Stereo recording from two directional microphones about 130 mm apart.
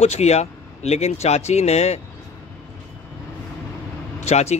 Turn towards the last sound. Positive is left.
turn(degrees=55)  # may be behind; listen again after turning